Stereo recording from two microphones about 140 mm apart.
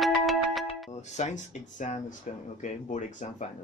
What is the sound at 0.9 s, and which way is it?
Speech, 55° left (ahead or behind).